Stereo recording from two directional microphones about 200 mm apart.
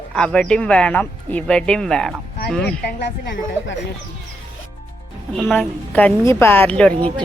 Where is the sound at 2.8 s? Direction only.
60° left (ahead or behind).